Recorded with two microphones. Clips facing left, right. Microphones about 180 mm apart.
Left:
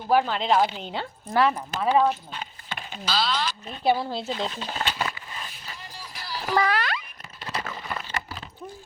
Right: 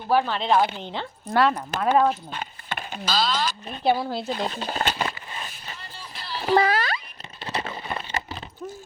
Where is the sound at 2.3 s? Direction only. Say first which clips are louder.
Right 3 dB; 55° right (ahead or behind).